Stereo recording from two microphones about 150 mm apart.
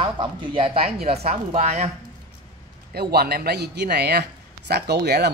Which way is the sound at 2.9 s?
90° right.